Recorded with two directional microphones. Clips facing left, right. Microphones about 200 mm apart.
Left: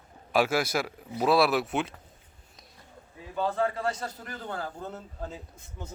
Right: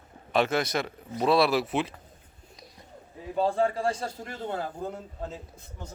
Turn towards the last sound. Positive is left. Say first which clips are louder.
# right 4 dB
turn(degrees=-20)  # may be behind; listen again after turning